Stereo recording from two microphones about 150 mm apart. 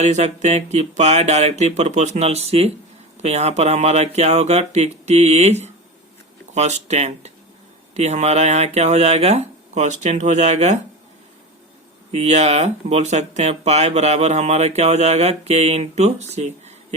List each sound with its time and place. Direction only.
0.0 s speech: 50° right (ahead or behind)
12.1 s speech: 45° right (ahead or behind)